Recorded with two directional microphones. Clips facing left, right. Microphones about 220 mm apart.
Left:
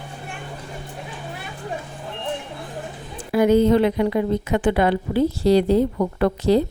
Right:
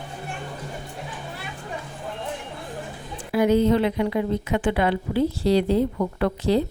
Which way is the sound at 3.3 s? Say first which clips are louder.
Left 3 dB; 45° left (ahead or behind).